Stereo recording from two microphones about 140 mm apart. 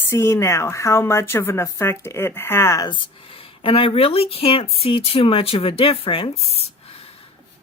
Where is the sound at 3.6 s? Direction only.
40° left (ahead or behind).